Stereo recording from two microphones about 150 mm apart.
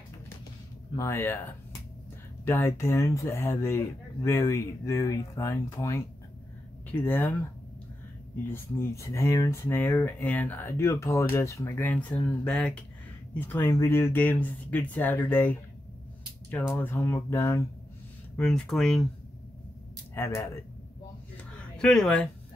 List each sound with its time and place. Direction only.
0.9 s speech: 15° left (ahead or behind)
8.5 s speech: 15° left (ahead or behind)
16.7 s speech: 15° left (ahead or behind)
18.3 s speech: 5° left (ahead or behind)
21.5 s a sound: 5° left (ahead or behind)